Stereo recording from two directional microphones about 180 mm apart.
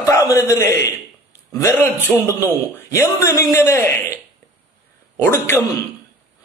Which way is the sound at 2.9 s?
15° left (ahead or behind).